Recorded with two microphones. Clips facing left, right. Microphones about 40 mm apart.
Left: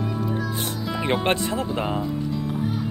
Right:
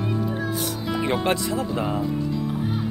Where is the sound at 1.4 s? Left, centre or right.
Left.